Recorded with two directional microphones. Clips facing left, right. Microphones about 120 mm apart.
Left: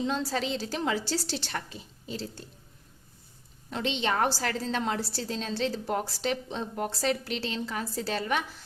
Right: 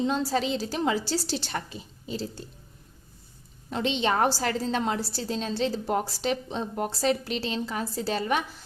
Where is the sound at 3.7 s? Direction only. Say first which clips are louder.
Right 3 dB; 20° right (ahead or behind).